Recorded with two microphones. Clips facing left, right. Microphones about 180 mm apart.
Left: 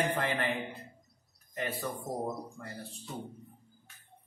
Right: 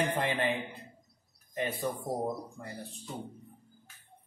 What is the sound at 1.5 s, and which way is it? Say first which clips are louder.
Speech: right 3 dB; 20° right (ahead or behind).